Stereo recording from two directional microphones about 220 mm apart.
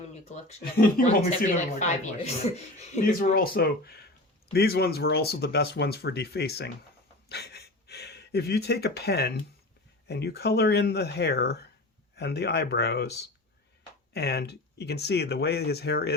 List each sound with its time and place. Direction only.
0.1 s speech: 30° left (ahead or behind); by 16.1 s 50° left (ahead or behind)